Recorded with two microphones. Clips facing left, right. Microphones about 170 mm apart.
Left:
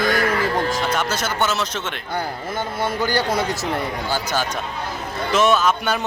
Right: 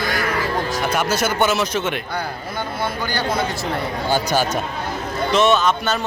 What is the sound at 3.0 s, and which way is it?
Speech, 40° left (ahead or behind).